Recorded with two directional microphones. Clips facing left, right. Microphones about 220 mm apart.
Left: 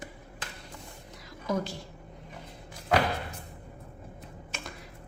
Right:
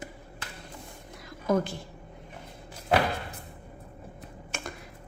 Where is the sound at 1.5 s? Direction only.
55° right (ahead or behind).